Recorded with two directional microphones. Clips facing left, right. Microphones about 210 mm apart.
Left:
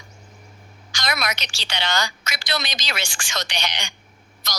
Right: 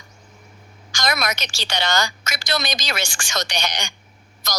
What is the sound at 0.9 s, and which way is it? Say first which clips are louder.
A woman's voice: right 3 dB; 45° right (ahead or behind).